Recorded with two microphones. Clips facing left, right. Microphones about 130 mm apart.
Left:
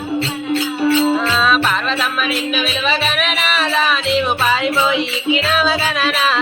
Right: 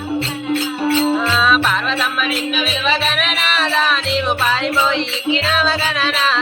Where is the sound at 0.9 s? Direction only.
Centre (ahead or behind).